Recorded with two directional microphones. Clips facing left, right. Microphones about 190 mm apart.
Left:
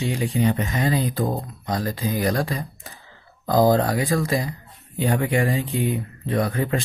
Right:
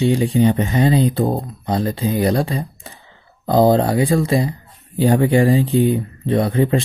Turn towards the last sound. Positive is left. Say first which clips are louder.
# right 6 dB
turn(degrees=-25)  # may be behind; listen again after turning